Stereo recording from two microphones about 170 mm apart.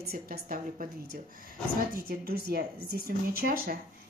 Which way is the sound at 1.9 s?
60° right (ahead or behind).